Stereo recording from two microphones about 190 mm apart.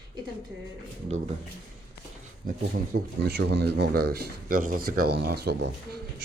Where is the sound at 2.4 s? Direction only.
50° right (ahead or behind).